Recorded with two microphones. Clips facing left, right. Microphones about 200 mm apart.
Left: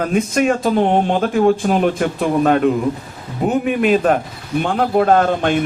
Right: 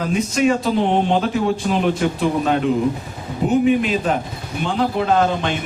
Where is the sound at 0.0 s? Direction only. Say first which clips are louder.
Left 2 dB; 55° left (ahead or behind).